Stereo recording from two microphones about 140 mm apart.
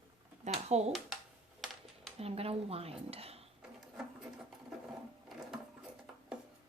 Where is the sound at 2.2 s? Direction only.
45° right (ahead or behind).